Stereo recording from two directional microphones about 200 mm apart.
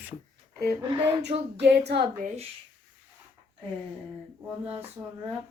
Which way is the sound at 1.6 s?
55° right (ahead or behind).